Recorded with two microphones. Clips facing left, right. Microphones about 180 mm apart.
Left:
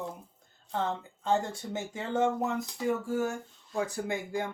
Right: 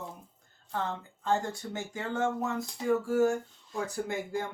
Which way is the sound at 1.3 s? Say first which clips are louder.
Left 1 dB; 20° left (ahead or behind).